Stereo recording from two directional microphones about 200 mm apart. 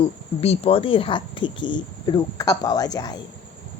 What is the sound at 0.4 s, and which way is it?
Speech, 30° left (ahead or behind).